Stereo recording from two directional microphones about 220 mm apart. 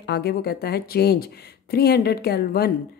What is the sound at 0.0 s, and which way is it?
A woman's voice, 45° left (ahead or behind).